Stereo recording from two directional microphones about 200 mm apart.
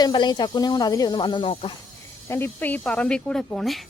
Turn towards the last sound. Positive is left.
turn(degrees=0)  # may be behind; listen again after turning